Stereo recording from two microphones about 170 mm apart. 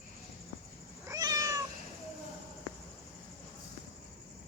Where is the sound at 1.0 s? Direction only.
20° right (ahead or behind).